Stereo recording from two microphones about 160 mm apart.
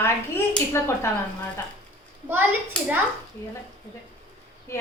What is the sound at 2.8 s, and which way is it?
Speech, 5° left (ahead or behind).